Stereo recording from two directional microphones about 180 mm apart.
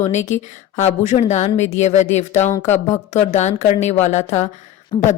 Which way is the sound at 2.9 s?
40° left (ahead or behind).